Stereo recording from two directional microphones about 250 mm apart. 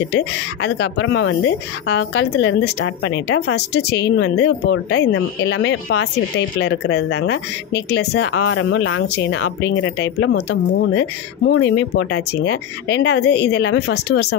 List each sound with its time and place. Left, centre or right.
0.1 s speech: left